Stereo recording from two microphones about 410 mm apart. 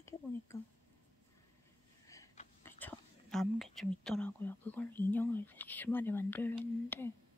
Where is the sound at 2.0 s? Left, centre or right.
Centre.